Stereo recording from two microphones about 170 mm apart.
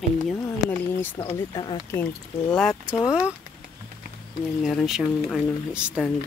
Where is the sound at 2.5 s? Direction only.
5° left (ahead or behind).